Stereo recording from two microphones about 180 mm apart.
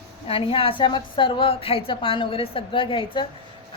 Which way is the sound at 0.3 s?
30° left (ahead or behind).